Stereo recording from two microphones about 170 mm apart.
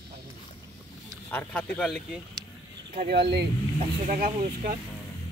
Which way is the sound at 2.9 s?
75° right (ahead or behind).